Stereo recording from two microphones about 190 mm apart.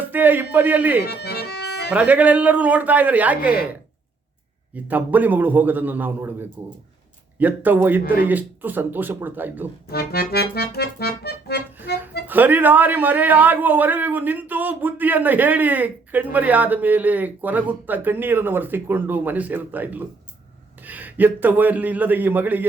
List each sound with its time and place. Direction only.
0.1 s a man's voice: 10° right (ahead or behind)
1.0 s accordion: 55° left (ahead or behind)
1.9 s a man's voice: 5° right (ahead or behind)
9.9 s accordion: 55° left (ahead or behind)
12.3 s a man's voice: 10° right (ahead or behind)